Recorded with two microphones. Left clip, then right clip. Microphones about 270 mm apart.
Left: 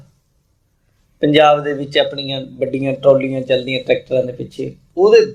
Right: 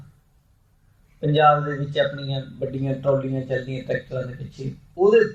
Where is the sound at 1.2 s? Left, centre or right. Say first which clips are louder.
Left 6 dB; left.